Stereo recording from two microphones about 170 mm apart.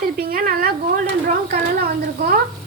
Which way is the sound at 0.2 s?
60° right (ahead or behind).